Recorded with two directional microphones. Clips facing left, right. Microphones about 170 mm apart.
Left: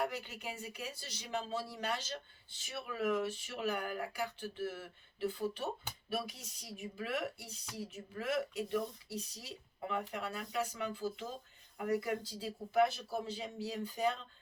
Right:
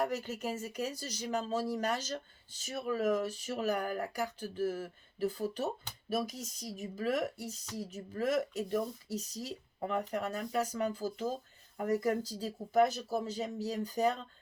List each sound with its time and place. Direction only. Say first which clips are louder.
0.0 s speech: right 5 dB; 40° right (ahead or behind)